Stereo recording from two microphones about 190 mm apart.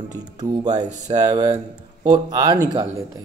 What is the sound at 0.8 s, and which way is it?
Speech, 35° right (ahead or behind).